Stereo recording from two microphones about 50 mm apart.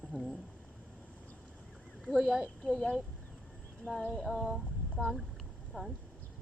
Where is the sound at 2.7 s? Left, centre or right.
Centre.